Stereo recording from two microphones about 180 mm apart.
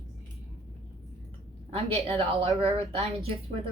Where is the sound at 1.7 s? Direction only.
35° right (ahead or behind).